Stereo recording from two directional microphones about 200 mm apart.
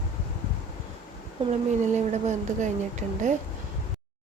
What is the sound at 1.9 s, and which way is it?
A woman's voice, 35° right (ahead or behind).